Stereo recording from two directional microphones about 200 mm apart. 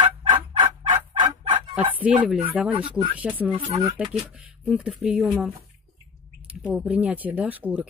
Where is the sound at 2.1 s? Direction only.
5° right (ahead or behind).